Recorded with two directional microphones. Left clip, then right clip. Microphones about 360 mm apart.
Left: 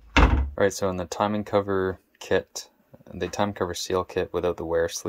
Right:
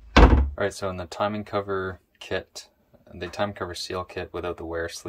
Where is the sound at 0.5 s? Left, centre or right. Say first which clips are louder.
Left 4 dB; centre.